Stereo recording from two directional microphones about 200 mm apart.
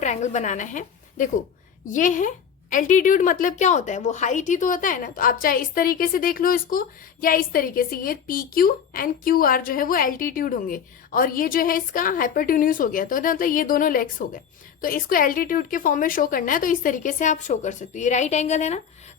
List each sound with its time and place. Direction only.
0.0 s a woman's voice: 35° left (ahead or behind)